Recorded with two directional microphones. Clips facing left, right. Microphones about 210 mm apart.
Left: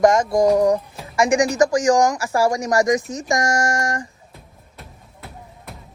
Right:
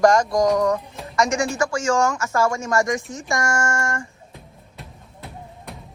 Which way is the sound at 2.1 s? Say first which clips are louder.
Left 2 dB; 35° left (ahead or behind).